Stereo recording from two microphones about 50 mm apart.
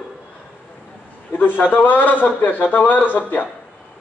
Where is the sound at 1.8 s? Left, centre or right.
Left.